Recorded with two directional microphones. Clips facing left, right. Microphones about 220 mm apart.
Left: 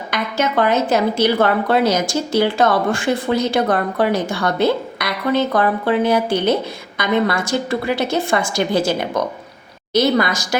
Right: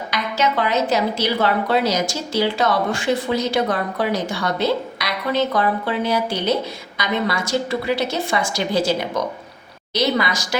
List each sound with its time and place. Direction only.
0.1 s speech: 50° left (ahead or behind)